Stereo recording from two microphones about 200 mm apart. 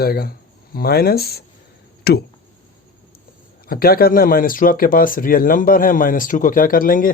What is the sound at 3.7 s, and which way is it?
Speech, 50° left (ahead or behind).